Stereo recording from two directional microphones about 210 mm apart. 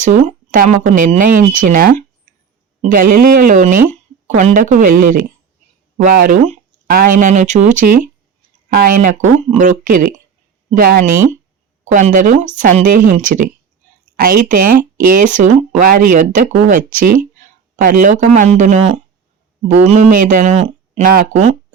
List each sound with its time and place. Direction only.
0.0 s speech: 35° right (ahead or behind)
6.0 s speech: 40° right (ahead or behind)